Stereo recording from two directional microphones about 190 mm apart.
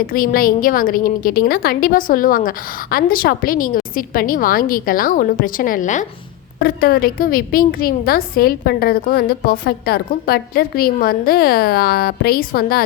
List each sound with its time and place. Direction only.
0.0 s a woman's voice: 50° left (ahead or behind)
6.6 s a woman's voice: 50° left (ahead or behind)